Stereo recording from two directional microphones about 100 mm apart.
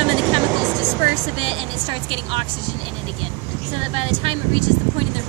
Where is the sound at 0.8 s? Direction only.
20° right (ahead or behind).